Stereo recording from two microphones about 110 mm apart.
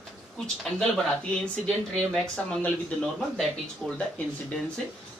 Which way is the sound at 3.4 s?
Centre (ahead or behind).